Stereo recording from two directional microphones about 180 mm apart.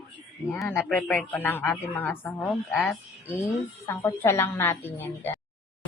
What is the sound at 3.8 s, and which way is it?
Speech, 15° left (ahead or behind).